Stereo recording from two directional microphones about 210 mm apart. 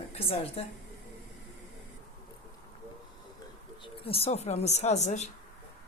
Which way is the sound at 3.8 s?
25° left (ahead or behind).